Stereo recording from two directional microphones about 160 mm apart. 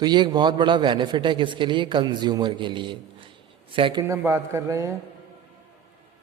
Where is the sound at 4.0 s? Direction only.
15° right (ahead or behind).